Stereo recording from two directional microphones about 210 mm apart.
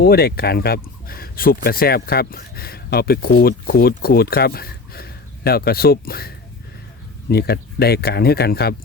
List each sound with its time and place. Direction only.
0.0 s speech: 50° left (ahead or behind)